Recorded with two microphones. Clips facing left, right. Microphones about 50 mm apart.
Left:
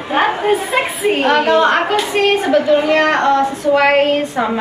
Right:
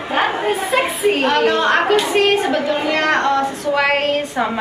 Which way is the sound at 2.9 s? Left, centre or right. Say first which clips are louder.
Left 3 dB; centre.